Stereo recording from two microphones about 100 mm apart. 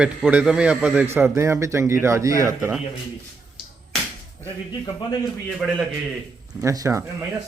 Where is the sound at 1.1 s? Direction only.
25° right (ahead or behind).